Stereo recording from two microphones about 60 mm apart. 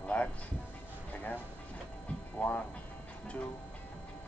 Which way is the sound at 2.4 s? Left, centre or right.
Left.